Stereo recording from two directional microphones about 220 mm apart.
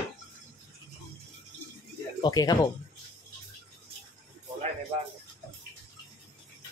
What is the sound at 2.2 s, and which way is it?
Speech, 20° left (ahead or behind).